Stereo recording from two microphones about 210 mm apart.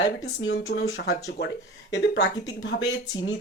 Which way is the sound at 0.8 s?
50° left (ahead or behind).